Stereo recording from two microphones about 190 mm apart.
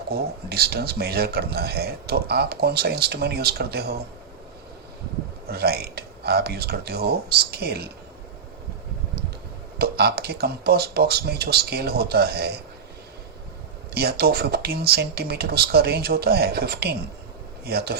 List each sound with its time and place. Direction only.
0.1 s a man's voice: 55° right (ahead or behind)
5.5 s a man's voice: 55° right (ahead or behind)
9.7 s a man's voice: 55° right (ahead or behind)
13.9 s a man's voice: 55° right (ahead or behind)